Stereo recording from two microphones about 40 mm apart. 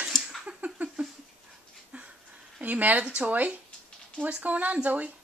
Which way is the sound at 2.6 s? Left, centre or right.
Right.